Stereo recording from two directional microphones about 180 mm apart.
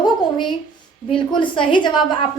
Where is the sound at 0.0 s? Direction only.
25° left (ahead or behind).